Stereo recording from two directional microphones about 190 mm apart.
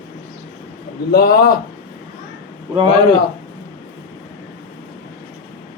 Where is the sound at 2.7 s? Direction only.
25° right (ahead or behind).